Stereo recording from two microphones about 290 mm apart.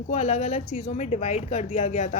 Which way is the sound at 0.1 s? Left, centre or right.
Left.